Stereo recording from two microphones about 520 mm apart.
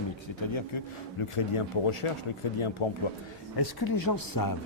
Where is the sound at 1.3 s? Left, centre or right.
Left.